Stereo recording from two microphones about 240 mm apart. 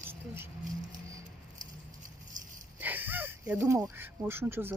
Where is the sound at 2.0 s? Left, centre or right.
Right.